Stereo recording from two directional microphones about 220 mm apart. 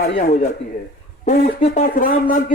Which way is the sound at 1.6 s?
35° left (ahead or behind).